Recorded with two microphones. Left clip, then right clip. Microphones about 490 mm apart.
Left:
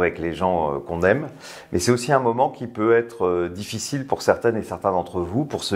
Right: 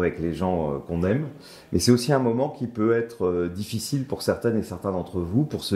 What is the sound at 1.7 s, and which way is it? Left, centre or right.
Speech, left.